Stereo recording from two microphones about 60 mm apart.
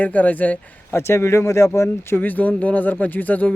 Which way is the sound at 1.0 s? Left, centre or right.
Left.